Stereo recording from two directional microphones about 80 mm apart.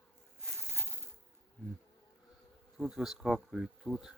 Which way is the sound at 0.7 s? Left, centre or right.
Right.